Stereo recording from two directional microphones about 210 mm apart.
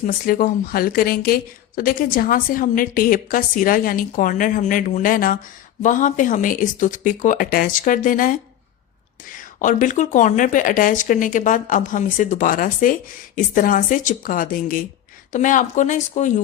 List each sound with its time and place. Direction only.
0.0 s speech: 40° left (ahead or behind)
9.6 s speech: 40° left (ahead or behind)